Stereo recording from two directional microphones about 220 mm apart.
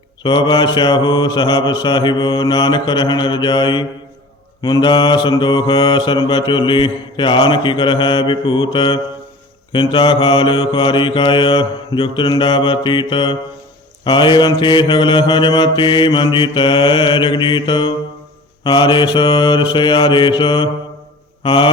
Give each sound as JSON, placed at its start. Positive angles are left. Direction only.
{"t": 0.2, "sound": "mantra", "side_deg": 20}